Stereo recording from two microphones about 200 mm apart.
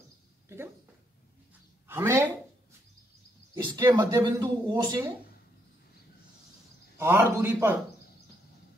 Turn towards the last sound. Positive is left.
turn(degrees=-10)  # may be behind; listen again after turning